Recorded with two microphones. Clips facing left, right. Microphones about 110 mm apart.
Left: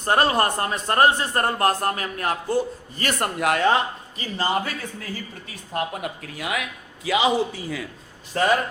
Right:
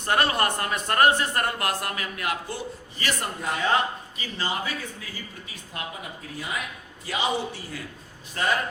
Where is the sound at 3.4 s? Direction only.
75° left (ahead or behind).